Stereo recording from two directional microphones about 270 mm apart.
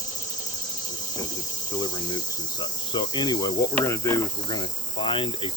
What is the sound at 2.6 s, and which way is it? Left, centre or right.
Cricket, centre.